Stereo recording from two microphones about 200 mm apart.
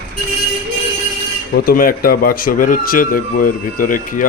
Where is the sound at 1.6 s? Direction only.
45° left (ahead or behind).